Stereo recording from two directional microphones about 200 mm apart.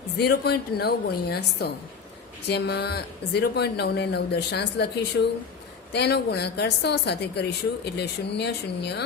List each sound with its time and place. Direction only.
0.2 s a woman's voice: 50° left (ahead or behind)
5.2 s speech: 70° left (ahead or behind)
5.9 s speech: 55° left (ahead or behind)